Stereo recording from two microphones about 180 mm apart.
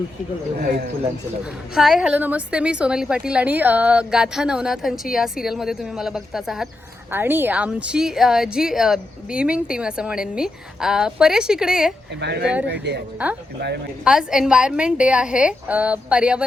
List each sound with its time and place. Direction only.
1.7 s a woman's voice: centre (ahead or behind)
12.2 s speech: 70° right (ahead or behind)
13.2 s a woman's voice: 5° right (ahead or behind)